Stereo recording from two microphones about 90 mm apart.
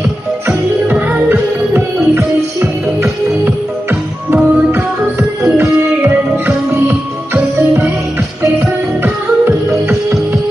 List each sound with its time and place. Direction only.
0.5 s music: 15° right (ahead or behind)
5.4 s music: 20° right (ahead or behind)